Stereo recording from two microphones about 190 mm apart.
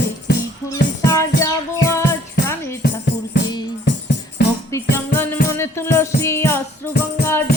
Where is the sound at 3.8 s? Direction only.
70° left (ahead or behind).